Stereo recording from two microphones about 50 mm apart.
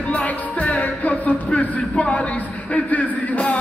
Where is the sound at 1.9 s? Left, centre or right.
Centre.